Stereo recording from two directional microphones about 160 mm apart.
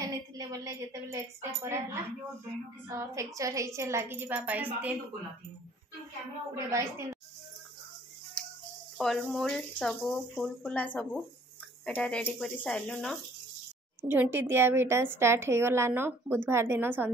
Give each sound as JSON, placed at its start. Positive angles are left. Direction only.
{"t": 0.0, "sound": "a woman's voice", "side_deg": -20}
{"t": 6.5, "sound": "a woman's voice", "side_deg": -15}
{"t": 8.4, "sound": "a sound", "side_deg": 5}
{"t": 8.9, "sound": "speech", "side_deg": 0}
{"t": 14.0, "sound": "a woman's voice", "side_deg": -10}